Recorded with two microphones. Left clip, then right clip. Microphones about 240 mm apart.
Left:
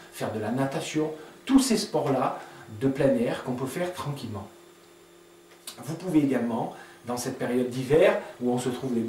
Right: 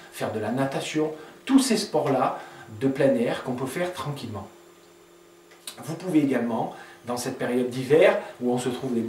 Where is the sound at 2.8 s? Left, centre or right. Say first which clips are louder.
Right 2 dB; centre.